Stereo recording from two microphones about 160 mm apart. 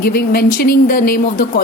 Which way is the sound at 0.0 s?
75° left (ahead or behind).